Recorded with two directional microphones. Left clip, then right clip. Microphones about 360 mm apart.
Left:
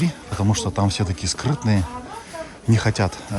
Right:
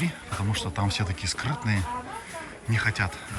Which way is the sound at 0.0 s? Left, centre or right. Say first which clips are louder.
Left 6 dB; centre.